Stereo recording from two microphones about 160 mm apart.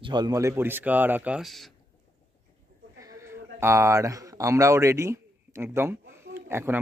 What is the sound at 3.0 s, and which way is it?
Speech, 15° right (ahead or behind).